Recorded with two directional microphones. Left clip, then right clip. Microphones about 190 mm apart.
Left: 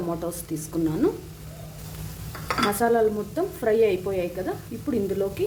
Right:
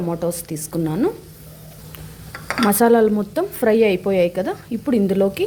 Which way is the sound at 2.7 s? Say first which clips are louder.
Right 8 dB; 50° right (ahead or behind).